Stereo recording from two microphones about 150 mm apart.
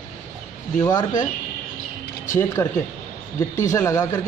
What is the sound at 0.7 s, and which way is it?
Speech, 25° left (ahead or behind).